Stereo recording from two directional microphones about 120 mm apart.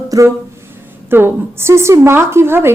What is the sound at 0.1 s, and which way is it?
A woman's voice, 30° right (ahead or behind).